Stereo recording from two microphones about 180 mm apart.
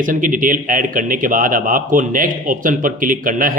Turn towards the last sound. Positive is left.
turn(degrees=-50)  # may be behind; listen again after turning